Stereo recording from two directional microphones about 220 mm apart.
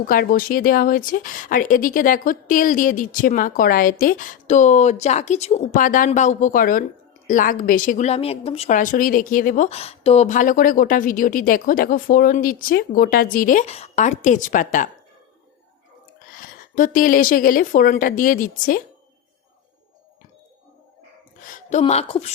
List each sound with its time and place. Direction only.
0.1 s speech: 40° left (ahead or behind)
16.4 s speech: 40° left (ahead or behind)
21.5 s speech: 30° left (ahead or behind)